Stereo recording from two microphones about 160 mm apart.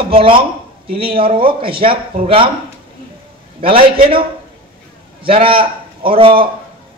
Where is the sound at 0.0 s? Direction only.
35° right (ahead or behind).